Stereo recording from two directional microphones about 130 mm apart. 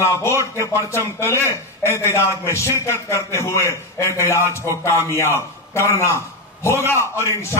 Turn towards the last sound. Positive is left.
turn(degrees=20)  # may be behind; listen again after turning